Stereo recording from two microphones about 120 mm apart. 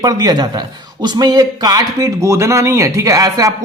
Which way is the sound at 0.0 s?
35° right (ahead or behind).